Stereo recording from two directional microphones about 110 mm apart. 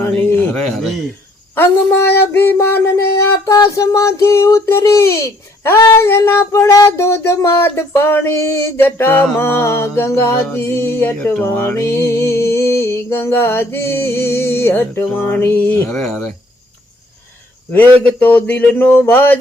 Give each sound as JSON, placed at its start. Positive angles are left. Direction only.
{"t": 0.5, "sound": "speech", "side_deg": 0}
{"t": 1.5, "sound": "music", "side_deg": 20}
{"t": 17.7, "sound": "speech", "side_deg": 20}